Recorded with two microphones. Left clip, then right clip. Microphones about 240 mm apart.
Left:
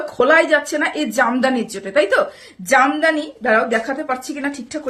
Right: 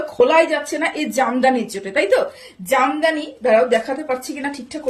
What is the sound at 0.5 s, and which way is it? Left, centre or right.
Speech, left.